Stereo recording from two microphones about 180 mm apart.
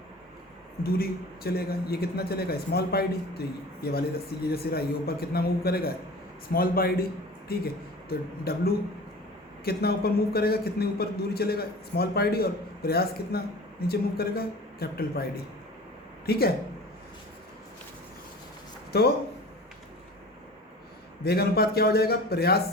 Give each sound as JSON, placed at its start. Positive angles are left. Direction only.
{"t": 0.9, "sound": "a man's voice", "side_deg": 55}
{"t": 9.6, "sound": "a man's voice", "side_deg": 60}
{"t": 16.3, "sound": "a man's voice", "side_deg": 60}
{"t": 18.9, "sound": "speech", "side_deg": 60}
{"t": 21.2, "sound": "a man's voice", "side_deg": 60}